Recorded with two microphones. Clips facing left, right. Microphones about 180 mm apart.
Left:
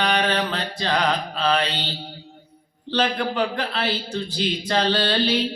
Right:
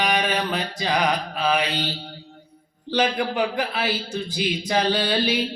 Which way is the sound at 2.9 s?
10° right (ahead or behind).